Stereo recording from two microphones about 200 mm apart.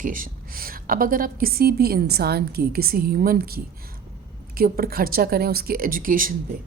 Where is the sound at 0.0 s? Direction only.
40° right (ahead or behind).